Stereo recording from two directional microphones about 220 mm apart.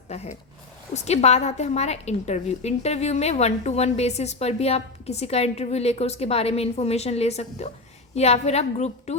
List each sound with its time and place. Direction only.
0.1 s a woman's voice: 30° left (ahead or behind)